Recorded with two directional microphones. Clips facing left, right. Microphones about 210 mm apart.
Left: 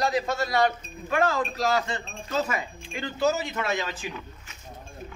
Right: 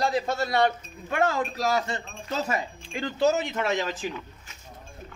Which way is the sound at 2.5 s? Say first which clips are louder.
Right 2 dB; 30° right (ahead or behind).